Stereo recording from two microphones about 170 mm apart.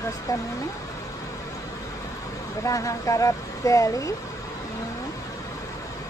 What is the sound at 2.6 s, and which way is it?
Speech, 20° left (ahead or behind).